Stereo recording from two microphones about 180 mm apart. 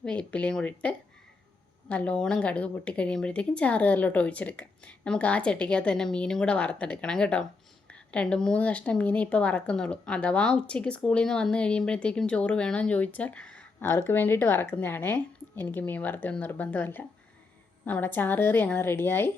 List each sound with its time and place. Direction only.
0.0 s speech: 5° left (ahead or behind)